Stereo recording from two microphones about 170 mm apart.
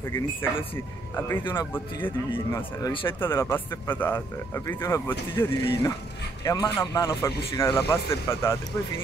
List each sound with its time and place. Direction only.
1.4 s speech: 25° left (ahead or behind)
1.7 s speech: 10° left (ahead or behind)
3.2 s speech: 15° left (ahead or behind)
8.3 s speech: 15° left (ahead or behind)